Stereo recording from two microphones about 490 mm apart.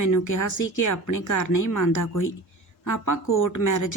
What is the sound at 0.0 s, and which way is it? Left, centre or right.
Speech, left.